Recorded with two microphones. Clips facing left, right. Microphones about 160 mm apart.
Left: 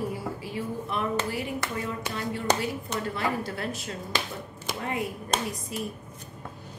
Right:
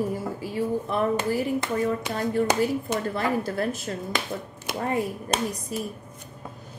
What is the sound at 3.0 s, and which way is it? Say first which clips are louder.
Speech: right 4 dB; 45° right (ahead or behind).